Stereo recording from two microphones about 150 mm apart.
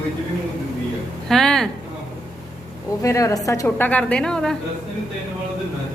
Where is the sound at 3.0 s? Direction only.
20° left (ahead or behind); by 4.5 s 5° left (ahead or behind).